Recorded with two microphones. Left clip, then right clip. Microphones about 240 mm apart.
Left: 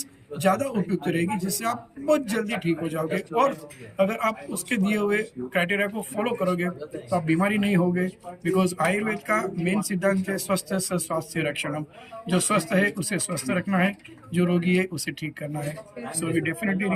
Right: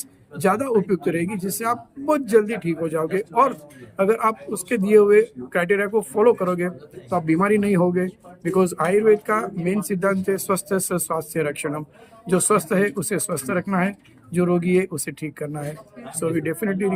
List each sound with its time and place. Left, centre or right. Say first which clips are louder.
0.4 s speech: right 4 dB; centre
16.2 s speech: right 4 dB; centre